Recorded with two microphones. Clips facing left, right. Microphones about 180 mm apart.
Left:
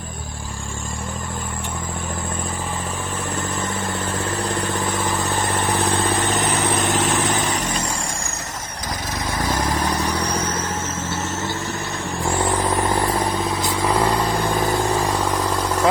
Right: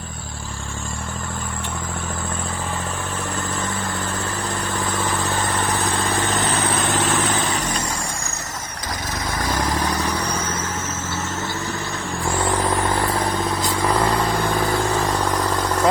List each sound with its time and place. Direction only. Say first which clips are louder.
12.7 s vehicle: left 1 dB; 15° left (ahead or behind)